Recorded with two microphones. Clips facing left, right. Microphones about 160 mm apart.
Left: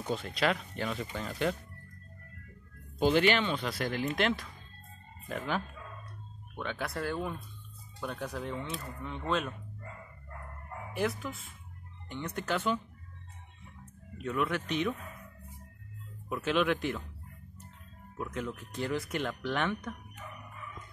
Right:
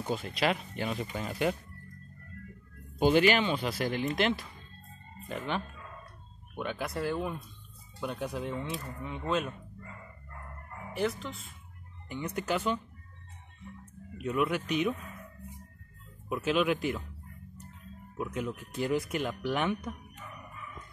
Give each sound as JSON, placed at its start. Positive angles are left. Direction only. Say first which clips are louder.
{"t": 0.1, "sound": "speech", "louder": "even", "side_deg": -5}
{"t": 0.5, "sound": "speech", "louder": "right 1 dB", "side_deg": -20}
{"t": 1.3, "sound": "speech", "louder": "right 2 dB", "side_deg": -10}
{"t": 3.0, "sound": "speech", "louder": "right 2 dB", "side_deg": -10}
{"t": 11.0, "sound": "speech", "louder": "right 1 dB", "side_deg": 5}
{"t": 12.1, "sound": "speech", "louder": "right 2 dB", "side_deg": -10}
{"t": 14.1, "sound": "speech", "louder": "right 2 dB", "side_deg": -5}
{"t": 16.3, "sound": "speech", "louder": "right 1 dB", "side_deg": -5}
{"t": 18.1, "sound": "speech", "louder": "right 2 dB", "side_deg": -10}